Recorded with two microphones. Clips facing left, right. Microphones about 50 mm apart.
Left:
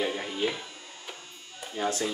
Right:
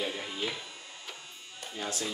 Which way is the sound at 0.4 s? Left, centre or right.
Centre.